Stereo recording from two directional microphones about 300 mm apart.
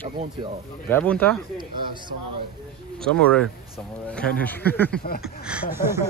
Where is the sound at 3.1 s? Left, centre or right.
Centre.